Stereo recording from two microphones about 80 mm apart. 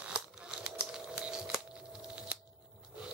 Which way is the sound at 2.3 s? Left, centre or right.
Centre.